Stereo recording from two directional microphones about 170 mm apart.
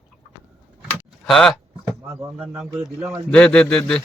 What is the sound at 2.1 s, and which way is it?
Speech, 15° right (ahead or behind).